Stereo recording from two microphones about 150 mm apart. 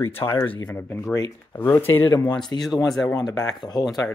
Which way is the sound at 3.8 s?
Centre (ahead or behind).